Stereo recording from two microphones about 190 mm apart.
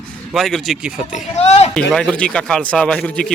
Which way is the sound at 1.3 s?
35° left (ahead or behind).